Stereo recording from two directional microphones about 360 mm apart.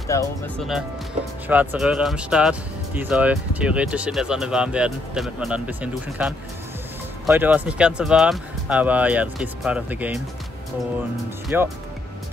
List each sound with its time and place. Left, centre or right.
0.1 s speech: centre
11.4 s speech: centre